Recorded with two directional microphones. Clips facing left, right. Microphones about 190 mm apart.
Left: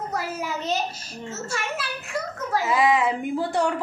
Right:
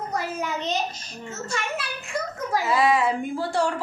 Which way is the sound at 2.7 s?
15° left (ahead or behind).